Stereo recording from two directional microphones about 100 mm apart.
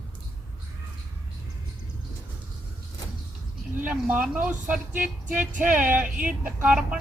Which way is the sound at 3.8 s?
15° right (ahead or behind).